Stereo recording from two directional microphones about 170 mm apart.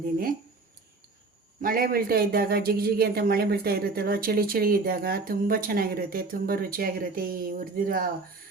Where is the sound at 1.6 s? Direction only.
60° right (ahead or behind).